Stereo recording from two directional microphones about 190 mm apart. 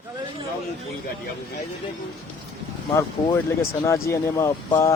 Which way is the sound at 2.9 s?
15° left (ahead or behind).